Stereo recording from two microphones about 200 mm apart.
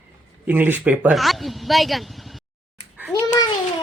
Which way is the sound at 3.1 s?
20° left (ahead or behind).